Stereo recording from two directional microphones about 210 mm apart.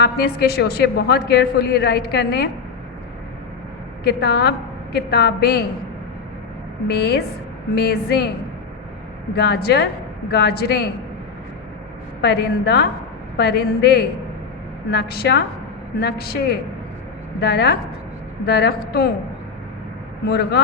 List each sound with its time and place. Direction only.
0.0 s a man's voice: 50° left (ahead or behind)
4.0 s a man's voice: 50° left (ahead or behind)
6.8 s a man's voice: 50° left (ahead or behind)
9.3 s a man's voice: 50° left (ahead or behind)
12.2 s a man's voice: 50° left (ahead or behind)
17.4 s a man's voice: 50° left (ahead or behind)
20.2 s a man's voice: 50° left (ahead or behind)